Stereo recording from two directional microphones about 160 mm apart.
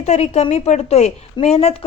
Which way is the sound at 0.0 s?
45° left (ahead or behind).